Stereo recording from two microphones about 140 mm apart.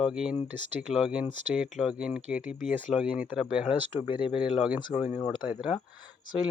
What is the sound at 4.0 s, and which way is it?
Speech, 35° left (ahead or behind).